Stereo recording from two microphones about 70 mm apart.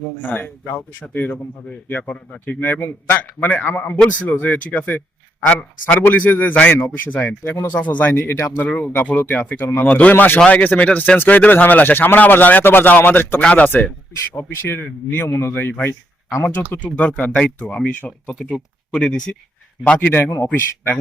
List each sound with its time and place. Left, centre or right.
0.2 s speech: left
7.5 s speech: left
7.8 s speech: left
8.1 s speech: left
8.5 s speech: left
13.4 s speech: centre
14.3 s speech: left
15.5 s speech: left
16.8 s speech: centre
19.8 s speech: left